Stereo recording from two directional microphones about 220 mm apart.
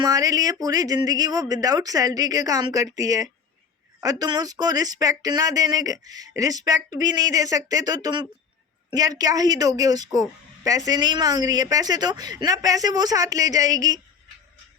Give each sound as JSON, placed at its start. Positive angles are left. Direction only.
{"t": 0.0, "sound": "a woman's voice", "side_deg": -15}